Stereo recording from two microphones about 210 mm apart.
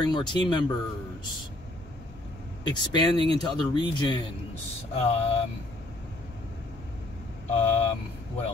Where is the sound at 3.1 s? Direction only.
25° right (ahead or behind).